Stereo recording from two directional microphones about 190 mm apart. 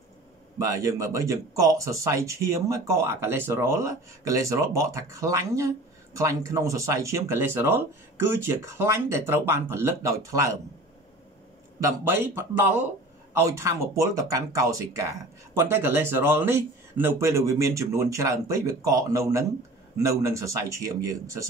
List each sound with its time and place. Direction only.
0.6 s speech: 15° right (ahead or behind)
11.8 s speech: 15° right (ahead or behind)